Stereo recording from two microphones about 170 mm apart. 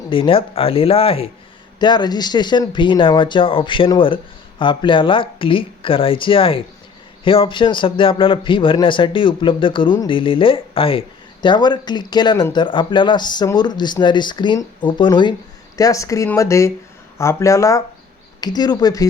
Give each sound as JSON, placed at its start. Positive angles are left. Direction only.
{"t": 0.1, "sound": "speech", "side_deg": 30}